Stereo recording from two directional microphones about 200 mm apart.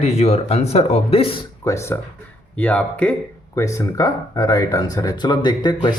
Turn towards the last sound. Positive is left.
turn(degrees=20)  # may be behind; listen again after turning